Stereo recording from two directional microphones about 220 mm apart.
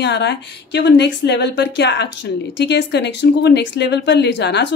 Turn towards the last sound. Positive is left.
turn(degrees=50)  # may be behind; listen again after turning